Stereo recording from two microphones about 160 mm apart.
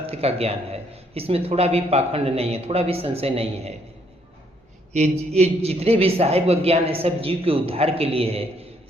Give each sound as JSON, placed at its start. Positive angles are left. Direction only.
{"t": 0.0, "sound": "a sound", "side_deg": -40}
{"t": 1.3, "sound": "speech", "side_deg": -40}
{"t": 5.3, "sound": "speech", "side_deg": -40}